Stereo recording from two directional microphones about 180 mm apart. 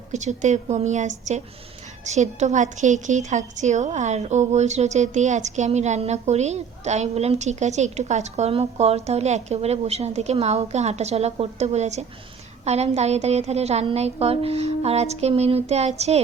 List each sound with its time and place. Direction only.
0.1 s a woman's voice: 40° right (ahead or behind)